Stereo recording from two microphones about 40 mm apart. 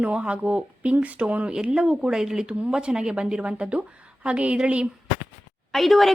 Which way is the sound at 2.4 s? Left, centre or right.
Right.